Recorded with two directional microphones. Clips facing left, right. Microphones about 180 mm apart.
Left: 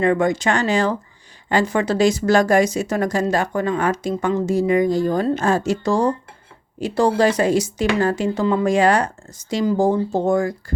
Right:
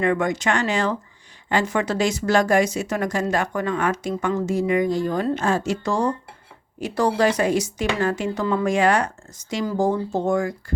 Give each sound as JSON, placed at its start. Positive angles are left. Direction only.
{"t": 0.0, "sound": "speech", "side_deg": 30}